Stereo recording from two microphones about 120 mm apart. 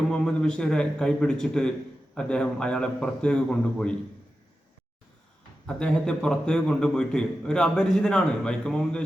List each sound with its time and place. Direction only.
0.1 s a man's voice: 5° left (ahead or behind)
5.6 s a man's voice: 5° left (ahead or behind)